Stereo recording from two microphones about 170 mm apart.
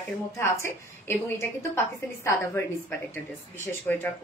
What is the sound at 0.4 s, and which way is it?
A woman's voice, 15° left (ahead or behind).